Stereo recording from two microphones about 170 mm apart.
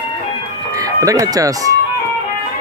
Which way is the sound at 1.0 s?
20° right (ahead or behind).